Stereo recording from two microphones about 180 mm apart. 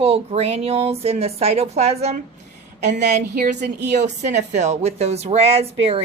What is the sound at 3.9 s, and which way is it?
A woman's voice, 40° right (ahead or behind).